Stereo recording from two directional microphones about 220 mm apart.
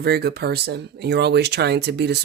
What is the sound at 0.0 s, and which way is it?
Speech, 45° right (ahead or behind).